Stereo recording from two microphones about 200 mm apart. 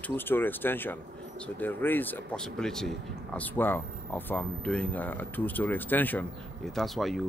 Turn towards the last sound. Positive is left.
turn(degrees=0)  # may be behind; listen again after turning